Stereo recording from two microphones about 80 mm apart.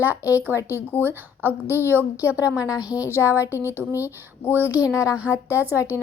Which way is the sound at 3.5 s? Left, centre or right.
Right.